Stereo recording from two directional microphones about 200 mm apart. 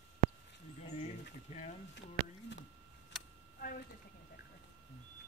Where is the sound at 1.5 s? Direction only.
35° left (ahead or behind).